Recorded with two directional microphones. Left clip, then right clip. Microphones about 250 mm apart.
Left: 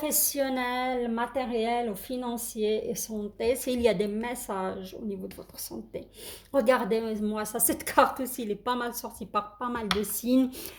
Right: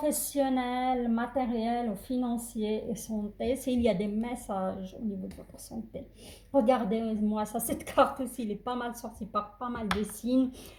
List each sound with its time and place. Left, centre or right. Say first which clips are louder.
0.3 s speech: left 1 dB; left
6.5 s speech: left 2 dB; left